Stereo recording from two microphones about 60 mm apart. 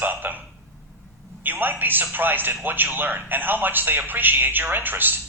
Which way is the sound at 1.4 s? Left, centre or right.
Right.